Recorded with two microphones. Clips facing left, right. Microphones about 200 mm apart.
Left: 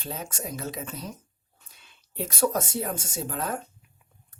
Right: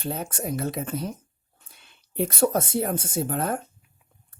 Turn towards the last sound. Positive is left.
turn(degrees=-55)  # may be behind; listen again after turning